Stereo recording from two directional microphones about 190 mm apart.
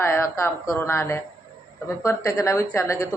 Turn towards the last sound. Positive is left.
turn(degrees=20)  # may be behind; listen again after turning